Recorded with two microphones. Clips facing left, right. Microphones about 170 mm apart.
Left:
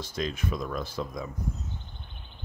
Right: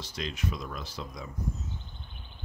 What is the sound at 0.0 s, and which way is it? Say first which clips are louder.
Speech: left 4 dB; 50° left (ahead or behind).